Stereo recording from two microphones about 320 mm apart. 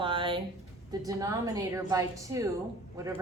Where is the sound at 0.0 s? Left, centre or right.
Centre.